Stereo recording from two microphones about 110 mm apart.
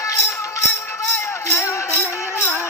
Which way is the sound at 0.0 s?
25° left (ahead or behind).